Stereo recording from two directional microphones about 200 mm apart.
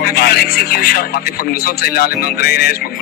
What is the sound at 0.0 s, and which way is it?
Speech, 50° left (ahead or behind).